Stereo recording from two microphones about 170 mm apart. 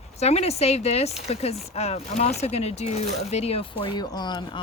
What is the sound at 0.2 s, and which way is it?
Speech, 40° left (ahead or behind).